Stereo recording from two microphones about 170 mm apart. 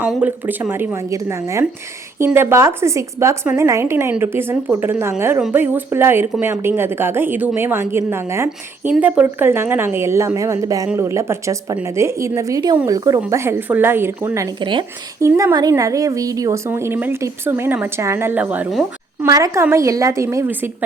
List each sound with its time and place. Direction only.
0.1 s a woman's voice: 10° right (ahead or behind); by 14.8 s 30° right (ahead or behind)
15.2 s a woman's voice: 15° right (ahead or behind)
19.2 s a woman's voice: 20° right (ahead or behind)